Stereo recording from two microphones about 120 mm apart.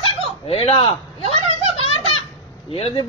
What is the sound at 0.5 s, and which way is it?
Speech, 55° left (ahead or behind).